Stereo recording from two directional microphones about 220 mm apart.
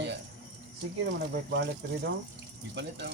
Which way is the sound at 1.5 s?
50° right (ahead or behind).